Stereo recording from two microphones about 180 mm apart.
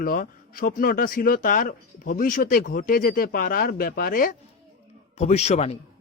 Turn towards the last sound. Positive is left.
turn(degrees=35)  # may be behind; listen again after turning